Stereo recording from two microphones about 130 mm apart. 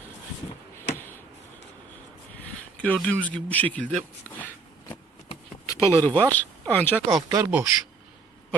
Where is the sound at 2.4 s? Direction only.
10° left (ahead or behind).